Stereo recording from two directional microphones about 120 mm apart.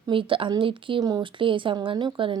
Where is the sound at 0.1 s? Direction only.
45° right (ahead or behind).